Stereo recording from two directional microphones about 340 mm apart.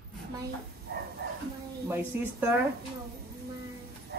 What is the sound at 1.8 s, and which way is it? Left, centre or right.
Speech, centre.